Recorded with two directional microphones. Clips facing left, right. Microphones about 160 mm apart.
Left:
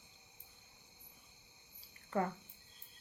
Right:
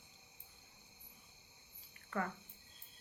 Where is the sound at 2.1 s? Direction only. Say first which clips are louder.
Left 4 dB; 30° left (ahead or behind).